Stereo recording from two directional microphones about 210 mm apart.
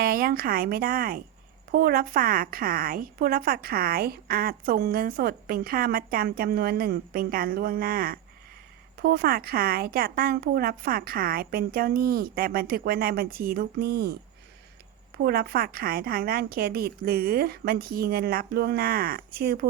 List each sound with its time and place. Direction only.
0.0 s speech: 45° right (ahead or behind)
15.2 s speech: 45° right (ahead or behind)